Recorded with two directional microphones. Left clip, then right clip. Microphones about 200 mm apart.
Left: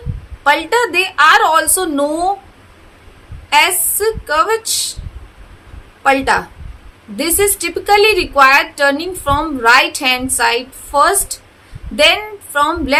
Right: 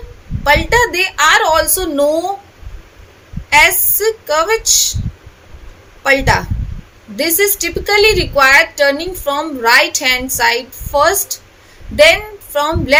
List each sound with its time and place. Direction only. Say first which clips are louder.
0.4 s a woman's voice: right 2 dB; 5° left (ahead or behind)
3.5 s a woman's voice: right 2 dB; 5° left (ahead or behind)
6.0 s a woman's voice: even; 5° left (ahead or behind)